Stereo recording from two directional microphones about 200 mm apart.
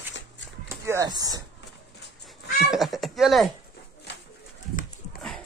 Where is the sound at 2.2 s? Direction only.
Centre (ahead or behind).